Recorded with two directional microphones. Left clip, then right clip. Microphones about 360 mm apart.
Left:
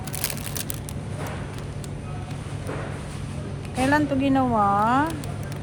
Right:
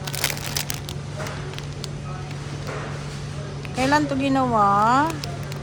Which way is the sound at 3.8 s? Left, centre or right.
Centre.